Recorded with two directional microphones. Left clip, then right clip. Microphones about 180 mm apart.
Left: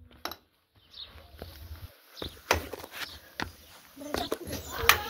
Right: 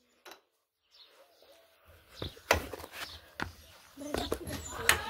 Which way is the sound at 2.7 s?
20° left (ahead or behind).